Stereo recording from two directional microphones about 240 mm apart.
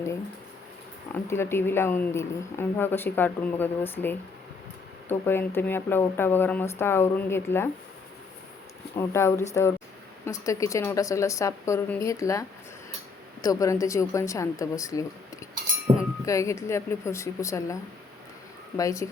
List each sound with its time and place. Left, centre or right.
1.3 s a woman's voice: centre
9.0 s a woman's voice: centre
18.8 s a woman's voice: centre